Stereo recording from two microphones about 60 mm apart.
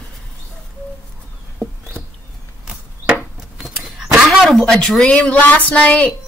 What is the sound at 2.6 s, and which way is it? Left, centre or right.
Chop, right.